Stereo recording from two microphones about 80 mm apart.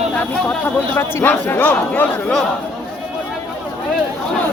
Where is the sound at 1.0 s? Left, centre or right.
Left.